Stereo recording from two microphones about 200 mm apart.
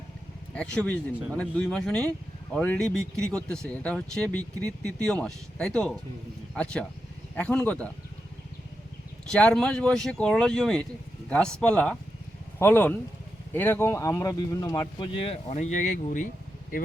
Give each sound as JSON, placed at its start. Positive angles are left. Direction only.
{"t": 0.5, "sound": "speech", "side_deg": 5}
{"t": 9.3, "sound": "speech", "side_deg": 5}